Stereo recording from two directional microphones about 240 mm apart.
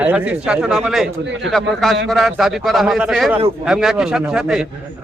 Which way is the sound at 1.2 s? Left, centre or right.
Right.